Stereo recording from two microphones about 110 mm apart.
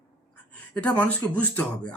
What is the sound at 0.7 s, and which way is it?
Speech, 10° left (ahead or behind).